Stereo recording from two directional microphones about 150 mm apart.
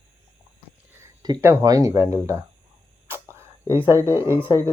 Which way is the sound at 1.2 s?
25° right (ahead or behind).